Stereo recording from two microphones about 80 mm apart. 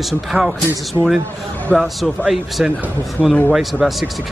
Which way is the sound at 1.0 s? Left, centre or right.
Right.